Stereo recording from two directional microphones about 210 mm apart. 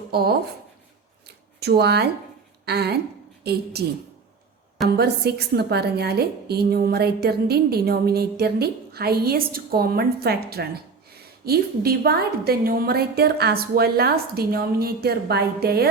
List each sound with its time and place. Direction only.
0.1 s speech: 50° right (ahead or behind)
1.5 s a woman's voice: 50° right (ahead or behind)
4.9 s a woman's voice: 50° right (ahead or behind)